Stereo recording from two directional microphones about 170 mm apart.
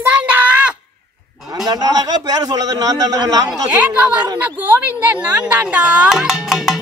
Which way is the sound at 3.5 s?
10° right (ahead or behind).